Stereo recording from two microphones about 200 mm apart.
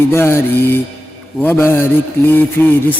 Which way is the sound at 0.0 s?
10° left (ahead or behind).